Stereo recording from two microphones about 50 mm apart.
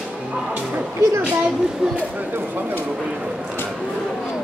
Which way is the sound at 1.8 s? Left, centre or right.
Centre.